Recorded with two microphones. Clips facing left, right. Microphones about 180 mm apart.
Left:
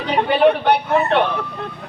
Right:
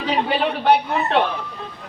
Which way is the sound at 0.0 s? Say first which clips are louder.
Left 6 dB; 60° left (ahead or behind).